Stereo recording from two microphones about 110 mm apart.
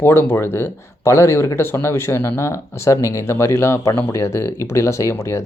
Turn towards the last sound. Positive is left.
turn(degrees=25)  # may be behind; listen again after turning